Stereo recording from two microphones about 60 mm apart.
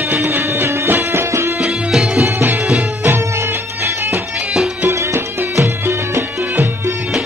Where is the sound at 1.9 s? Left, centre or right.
Centre.